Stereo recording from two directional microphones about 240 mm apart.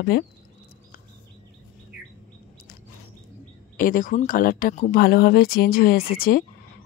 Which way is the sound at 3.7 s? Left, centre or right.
Left.